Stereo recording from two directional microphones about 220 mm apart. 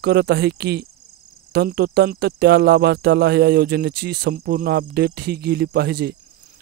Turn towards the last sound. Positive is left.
turn(degrees=-45)  # may be behind; listen again after turning